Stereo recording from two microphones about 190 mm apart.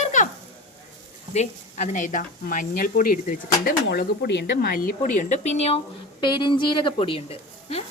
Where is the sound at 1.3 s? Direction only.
40° left (ahead or behind).